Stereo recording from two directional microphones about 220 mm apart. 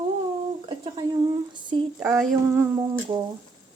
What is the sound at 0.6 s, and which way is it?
Speech, 20° right (ahead or behind).